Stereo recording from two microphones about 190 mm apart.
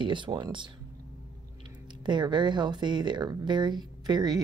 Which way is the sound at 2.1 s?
25° right (ahead or behind).